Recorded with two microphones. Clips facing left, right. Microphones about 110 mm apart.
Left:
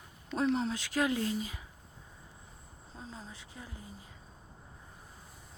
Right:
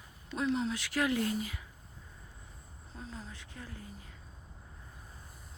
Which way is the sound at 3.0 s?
25° left (ahead or behind).